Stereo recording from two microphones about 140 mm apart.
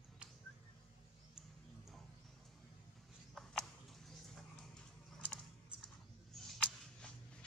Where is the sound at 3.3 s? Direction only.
Centre (ahead or behind).